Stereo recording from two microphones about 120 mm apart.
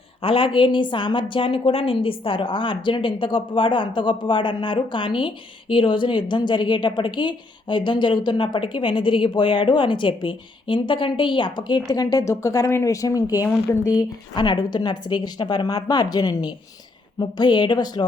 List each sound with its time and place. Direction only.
0.2 s a woman's voice: 50° left (ahead or behind)